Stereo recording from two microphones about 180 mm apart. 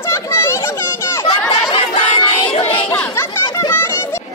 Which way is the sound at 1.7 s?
30° left (ahead or behind).